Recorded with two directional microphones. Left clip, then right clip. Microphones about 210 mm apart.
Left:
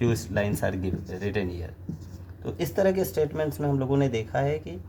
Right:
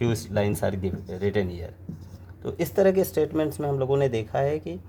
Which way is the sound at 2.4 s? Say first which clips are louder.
Right 3 dB; 45° right (ahead or behind).